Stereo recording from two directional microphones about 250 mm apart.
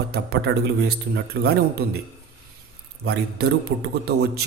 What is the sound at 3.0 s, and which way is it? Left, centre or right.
A man's voice, right.